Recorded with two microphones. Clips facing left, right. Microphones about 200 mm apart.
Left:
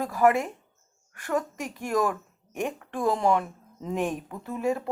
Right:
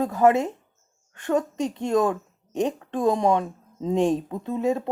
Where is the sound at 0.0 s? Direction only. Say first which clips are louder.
Right 3 dB; 20° right (ahead or behind).